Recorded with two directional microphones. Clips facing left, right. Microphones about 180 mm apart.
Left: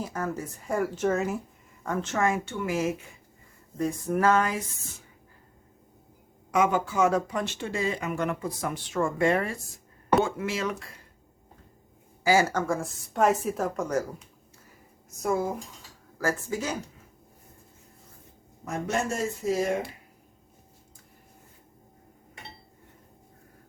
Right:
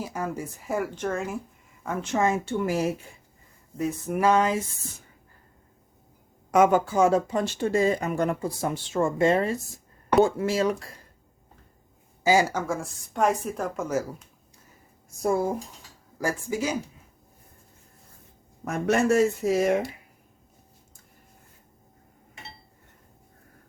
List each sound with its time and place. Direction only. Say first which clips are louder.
0.0 s a woman's voice: right 1 dB; 10° right (ahead or behind)
1.8 s speech: right 2 dB; 10° right (ahead or behind)
2.4 s speech: right 3 dB; 35° right (ahead or behind)
3.8 s a woman's voice: even; 5° right (ahead or behind)
4.3 s speech: right 3 dB; 20° right (ahead or behind)
6.5 s speech: right 5 dB; 45° right (ahead or behind); by 9.6 s 25° right (ahead or behind)
10.2 s speech: right 6 dB; 35° right (ahead or behind)
12.2 s a woman's voice: right 1 dB; 15° right (ahead or behind)
15.2 s speech: right 3 dB; 30° right (ahead or behind)
16.2 s speech: right 2 dB; 10° right (ahead or behind)
18.6 s speech: right 6 dB; 65° right (ahead or behind)